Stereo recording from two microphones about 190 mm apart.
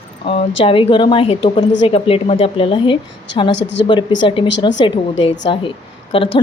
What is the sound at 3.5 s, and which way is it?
Speech, 70° left (ahead or behind).